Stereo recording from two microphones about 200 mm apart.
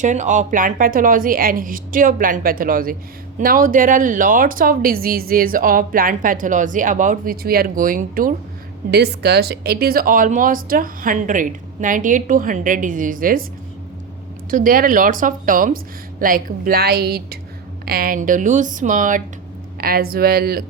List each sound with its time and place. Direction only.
0.0 s speech: 35° right (ahead or behind)
8.9 s speech: 55° right (ahead or behind)
14.5 s speech: 45° right (ahead or behind)